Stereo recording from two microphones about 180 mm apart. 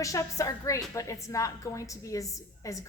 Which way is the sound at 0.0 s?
20° left (ahead or behind).